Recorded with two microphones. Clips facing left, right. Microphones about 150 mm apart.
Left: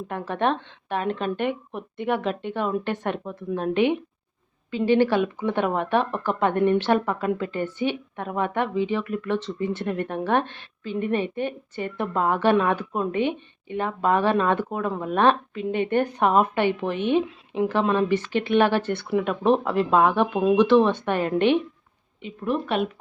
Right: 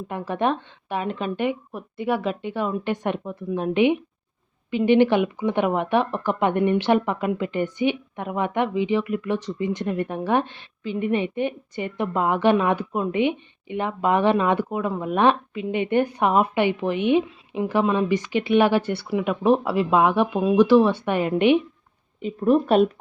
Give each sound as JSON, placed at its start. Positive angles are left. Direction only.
{"t": 0.1, "sound": "a woman's voice", "side_deg": -10}
{"t": 22.2, "sound": "speech", "side_deg": -40}